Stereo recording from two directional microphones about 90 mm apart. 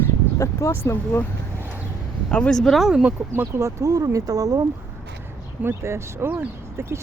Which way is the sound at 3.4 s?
30° right (ahead or behind).